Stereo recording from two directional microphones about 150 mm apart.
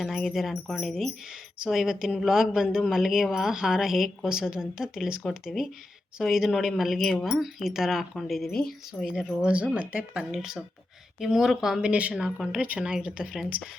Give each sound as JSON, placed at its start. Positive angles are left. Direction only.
{"t": 0.0, "sound": "speech", "side_deg": 0}